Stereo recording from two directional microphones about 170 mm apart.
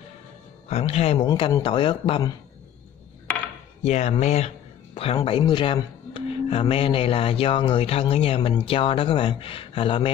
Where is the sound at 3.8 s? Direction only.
40° left (ahead or behind).